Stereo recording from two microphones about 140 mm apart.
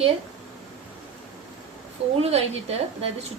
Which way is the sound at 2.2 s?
45° right (ahead or behind).